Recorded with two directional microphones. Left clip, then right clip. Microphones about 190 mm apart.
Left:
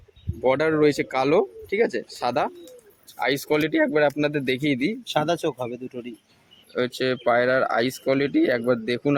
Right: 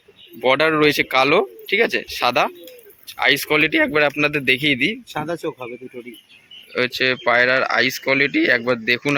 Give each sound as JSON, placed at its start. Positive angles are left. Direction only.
{"t": 0.4, "sound": "speech", "side_deg": 5}
{"t": 5.1, "sound": "speech", "side_deg": 25}
{"t": 6.7, "sound": "speech", "side_deg": 10}